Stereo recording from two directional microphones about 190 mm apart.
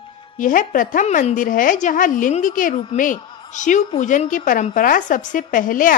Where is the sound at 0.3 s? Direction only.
45° left (ahead or behind).